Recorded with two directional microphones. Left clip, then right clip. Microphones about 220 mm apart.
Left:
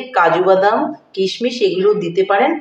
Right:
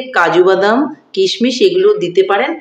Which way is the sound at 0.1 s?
50° right (ahead or behind).